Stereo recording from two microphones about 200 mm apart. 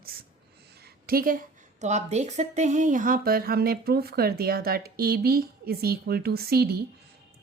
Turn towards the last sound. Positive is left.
turn(degrees=-50)  # may be behind; listen again after turning